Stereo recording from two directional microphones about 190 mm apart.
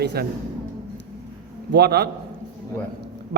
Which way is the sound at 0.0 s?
60° right (ahead or behind).